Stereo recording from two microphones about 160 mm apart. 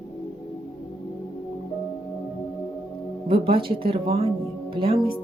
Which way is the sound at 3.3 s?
35° right (ahead or behind).